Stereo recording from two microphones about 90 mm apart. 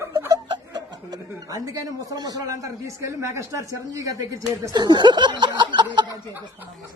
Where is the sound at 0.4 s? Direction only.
55° right (ahead or behind); by 1.8 s 40° right (ahead or behind).